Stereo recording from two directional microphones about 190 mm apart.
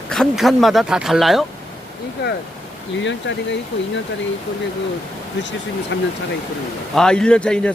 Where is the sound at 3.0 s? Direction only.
75° left (ahead or behind).